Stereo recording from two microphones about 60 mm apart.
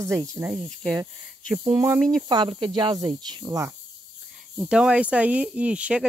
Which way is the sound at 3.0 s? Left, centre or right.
Right.